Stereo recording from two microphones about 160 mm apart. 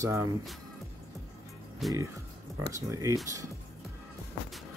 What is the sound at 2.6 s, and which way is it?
Speech, 20° right (ahead or behind).